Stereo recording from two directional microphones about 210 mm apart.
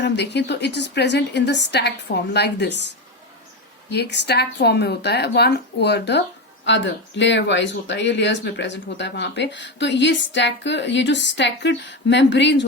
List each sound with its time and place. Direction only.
0.0 s speech: 55° left (ahead or behind)
3.8 s speech: 50° left (ahead or behind)